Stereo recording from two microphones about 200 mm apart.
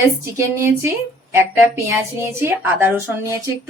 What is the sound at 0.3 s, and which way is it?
Speech, 10° right (ahead or behind).